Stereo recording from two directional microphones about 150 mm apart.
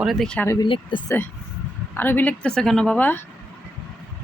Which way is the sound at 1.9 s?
15° left (ahead or behind).